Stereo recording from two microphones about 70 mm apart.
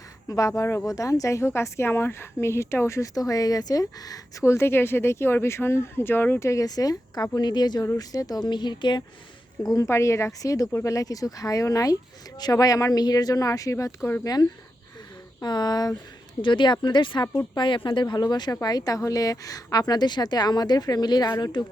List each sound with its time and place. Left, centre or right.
0.3 s speech: left
0.9 s speech: left
4.4 s speech: left
6.4 s speech: left
6.7 s a woman's voice: left
7.9 s speech: left
9.8 s speech: left
15.4 s a woman's voice: left
16.6 s speech: left
18.6 s a woman's voice: left
21.2 s a woman's voice: left